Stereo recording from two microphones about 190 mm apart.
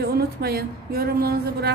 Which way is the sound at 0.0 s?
55° right (ahead or behind).